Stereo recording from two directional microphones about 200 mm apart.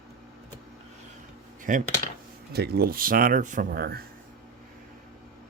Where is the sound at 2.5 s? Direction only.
50° right (ahead or behind).